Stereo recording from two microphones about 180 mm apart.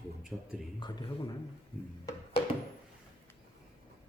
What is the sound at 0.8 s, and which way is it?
Speech, 25° left (ahead or behind).